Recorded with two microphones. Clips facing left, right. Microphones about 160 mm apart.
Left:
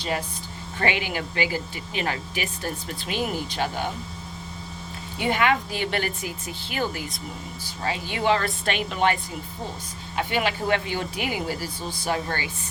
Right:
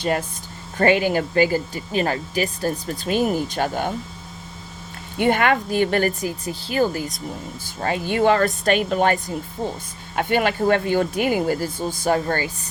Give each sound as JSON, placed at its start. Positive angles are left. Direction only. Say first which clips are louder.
{"t": 0.0, "sound": "speech", "louder": "right 6 dB", "side_deg": -50}
{"t": 5.1, "sound": "speech", "louder": "right 4 dB", "side_deg": -55}
{"t": 7.8, "sound": "speech", "louder": "right 8 dB", "side_deg": -50}
{"t": 10.2, "sound": "speech", "louder": "right 5 dB", "side_deg": -50}